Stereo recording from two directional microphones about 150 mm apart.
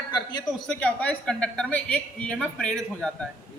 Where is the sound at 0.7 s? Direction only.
10° left (ahead or behind).